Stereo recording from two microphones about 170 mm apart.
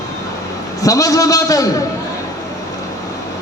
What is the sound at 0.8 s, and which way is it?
Speech, 20° left (ahead or behind).